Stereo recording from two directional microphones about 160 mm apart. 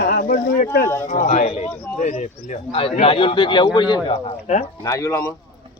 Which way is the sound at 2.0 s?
50° left (ahead or behind).